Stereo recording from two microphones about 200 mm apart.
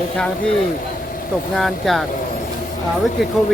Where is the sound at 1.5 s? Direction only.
Centre (ahead or behind).